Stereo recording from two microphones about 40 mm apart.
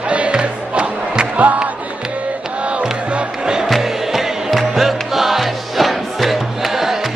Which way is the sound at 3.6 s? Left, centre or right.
Centre.